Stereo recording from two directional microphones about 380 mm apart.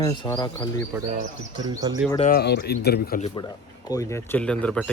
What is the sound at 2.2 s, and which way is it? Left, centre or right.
A man's voice, left.